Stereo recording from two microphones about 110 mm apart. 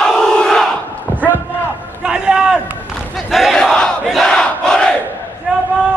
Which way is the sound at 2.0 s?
5° right (ahead or behind).